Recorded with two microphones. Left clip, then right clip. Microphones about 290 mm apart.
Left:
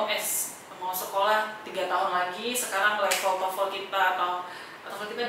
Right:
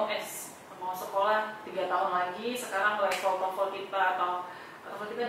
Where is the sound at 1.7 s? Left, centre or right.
Centre.